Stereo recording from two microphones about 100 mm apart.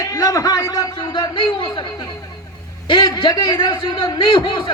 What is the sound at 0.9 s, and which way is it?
Speech, 55° left (ahead or behind).